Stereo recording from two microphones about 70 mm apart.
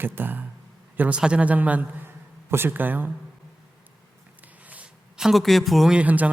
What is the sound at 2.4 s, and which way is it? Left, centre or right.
Speech, right.